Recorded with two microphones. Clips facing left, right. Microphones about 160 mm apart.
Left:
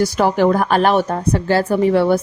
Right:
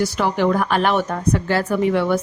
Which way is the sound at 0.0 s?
40° left (ahead or behind).